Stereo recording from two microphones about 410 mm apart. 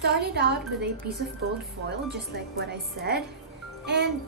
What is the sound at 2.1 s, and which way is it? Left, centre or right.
A woman's voice, right.